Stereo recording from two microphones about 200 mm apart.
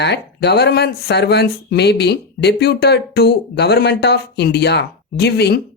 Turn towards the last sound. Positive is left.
turn(degrees=55)  # may be behind; listen again after turning